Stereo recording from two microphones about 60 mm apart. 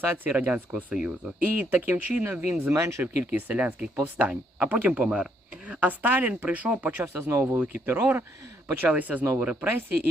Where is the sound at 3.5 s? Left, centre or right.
Right.